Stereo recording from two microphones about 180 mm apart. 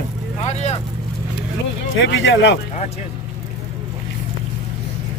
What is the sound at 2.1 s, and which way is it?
Speech, 85° left.